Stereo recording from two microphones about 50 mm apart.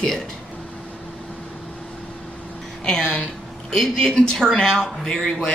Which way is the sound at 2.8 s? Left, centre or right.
Centre.